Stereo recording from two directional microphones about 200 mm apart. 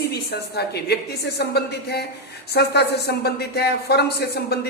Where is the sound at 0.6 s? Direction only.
55° left (ahead or behind).